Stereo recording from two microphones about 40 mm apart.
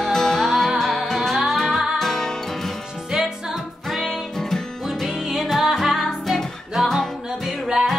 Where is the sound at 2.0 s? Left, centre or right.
Centre.